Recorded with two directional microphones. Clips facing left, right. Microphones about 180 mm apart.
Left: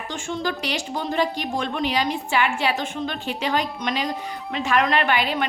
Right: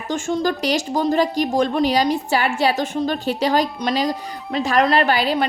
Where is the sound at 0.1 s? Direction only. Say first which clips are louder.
Right 7 dB; 40° right (ahead or behind).